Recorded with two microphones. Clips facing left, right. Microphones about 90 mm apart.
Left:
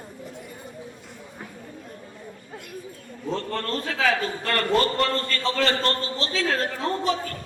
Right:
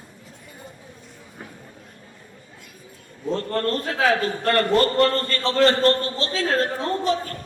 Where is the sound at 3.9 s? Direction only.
35° right (ahead or behind).